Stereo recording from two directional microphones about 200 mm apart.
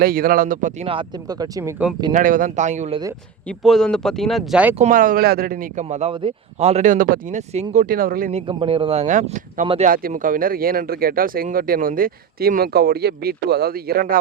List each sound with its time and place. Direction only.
0.0 s speech: 45° right (ahead or behind); by 1.7 s 20° right (ahead or behind)
2.1 s speech: 45° right (ahead or behind)
3.4 s speech: centre (ahead or behind)
4.7 s speech: 40° right (ahead or behind)
5.8 s speech: 30° right (ahead or behind)
9.9 s speech: 45° right (ahead or behind)